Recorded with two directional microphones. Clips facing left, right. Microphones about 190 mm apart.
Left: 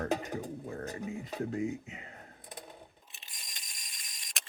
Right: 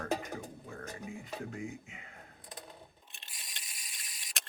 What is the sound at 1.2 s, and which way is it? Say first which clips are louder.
Speech: left 8 dB; 35° left (ahead or behind).